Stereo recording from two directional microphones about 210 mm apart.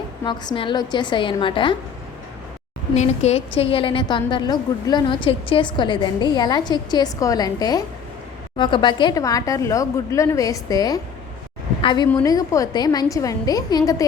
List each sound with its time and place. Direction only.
0.3 s a woman's voice: 25° left (ahead or behind)
2.9 s a woman's voice: 30° left (ahead or behind)